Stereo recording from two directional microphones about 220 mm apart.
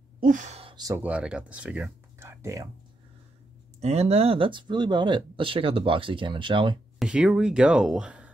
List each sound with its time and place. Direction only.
0.2 s speech: 35° right (ahead or behind); by 2.7 s 15° right (ahead or behind)
3.8 s speech: 30° right (ahead or behind)
7.0 s speech: 5° right (ahead or behind)